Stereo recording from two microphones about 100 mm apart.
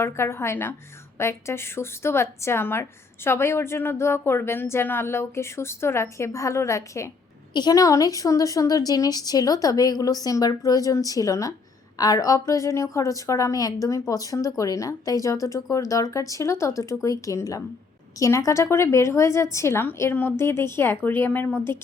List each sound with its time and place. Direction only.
0.0 s a woman's voice: 25° left (ahead or behind)
7.5 s a woman's voice: 40° left (ahead or behind); by 21.8 s 25° left (ahead or behind)